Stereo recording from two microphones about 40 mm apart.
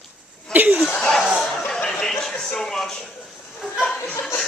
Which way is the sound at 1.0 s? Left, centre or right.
Left.